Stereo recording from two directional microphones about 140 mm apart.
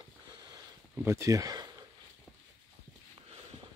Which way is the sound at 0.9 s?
20° right (ahead or behind).